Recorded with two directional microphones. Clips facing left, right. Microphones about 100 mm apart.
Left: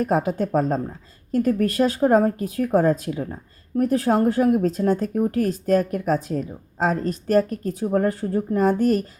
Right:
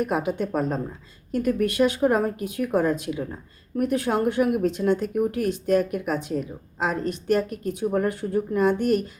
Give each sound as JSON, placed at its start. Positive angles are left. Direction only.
{"t": 0.0, "sound": "speech", "side_deg": 35}